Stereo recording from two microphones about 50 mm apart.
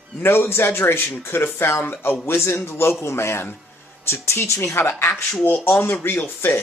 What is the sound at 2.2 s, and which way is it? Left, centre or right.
Speech, left.